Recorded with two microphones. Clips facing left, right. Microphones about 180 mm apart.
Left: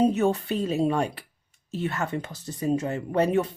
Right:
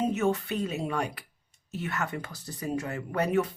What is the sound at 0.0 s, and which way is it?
Speech, 35° left (ahead or behind).